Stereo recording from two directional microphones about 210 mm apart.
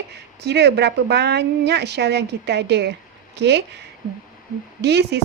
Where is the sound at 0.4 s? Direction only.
55° right (ahead or behind).